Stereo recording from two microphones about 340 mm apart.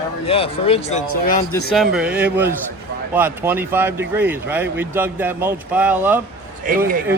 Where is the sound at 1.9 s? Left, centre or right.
Centre.